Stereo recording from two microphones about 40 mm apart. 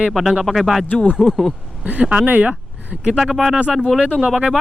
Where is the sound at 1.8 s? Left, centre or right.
Right.